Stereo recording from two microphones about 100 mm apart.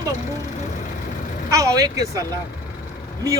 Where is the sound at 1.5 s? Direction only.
35° right (ahead or behind).